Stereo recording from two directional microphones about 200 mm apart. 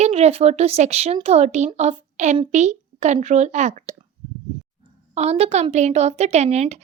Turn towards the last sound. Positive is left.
turn(degrees=-35)  # may be behind; listen again after turning